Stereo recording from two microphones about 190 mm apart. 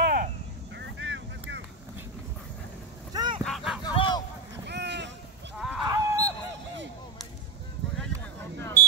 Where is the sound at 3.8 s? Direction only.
25° left (ahead or behind).